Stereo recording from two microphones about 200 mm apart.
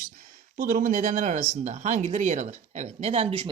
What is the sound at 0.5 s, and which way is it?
Speech, 45° right (ahead or behind).